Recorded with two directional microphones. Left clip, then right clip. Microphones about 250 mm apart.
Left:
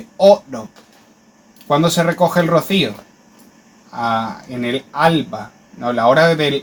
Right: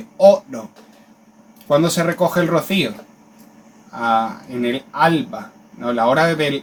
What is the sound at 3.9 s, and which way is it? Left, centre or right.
Speech, left.